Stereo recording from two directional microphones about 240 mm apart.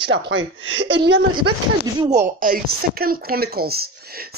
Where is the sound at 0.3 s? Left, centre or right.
Right.